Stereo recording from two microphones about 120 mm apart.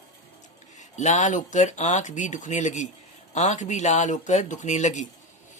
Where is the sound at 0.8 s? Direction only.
90° left.